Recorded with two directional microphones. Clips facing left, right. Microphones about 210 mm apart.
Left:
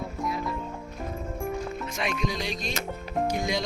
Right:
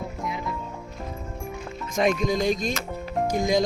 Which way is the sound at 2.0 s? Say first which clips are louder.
Right 9 dB; 45° right (ahead or behind).